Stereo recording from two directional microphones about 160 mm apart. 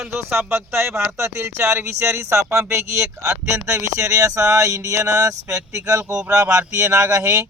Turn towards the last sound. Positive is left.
turn(degrees=-20)  # may be behind; listen again after turning